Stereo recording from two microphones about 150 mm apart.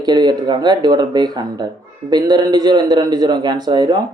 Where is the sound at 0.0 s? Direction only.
30° right (ahead or behind).